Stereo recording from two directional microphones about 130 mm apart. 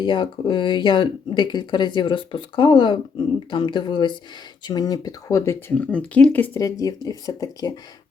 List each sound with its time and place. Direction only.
0.0 s speech: 35° left (ahead or behind); by 6.6 s 15° left (ahead or behind)
6.6 s speech: 25° left (ahead or behind)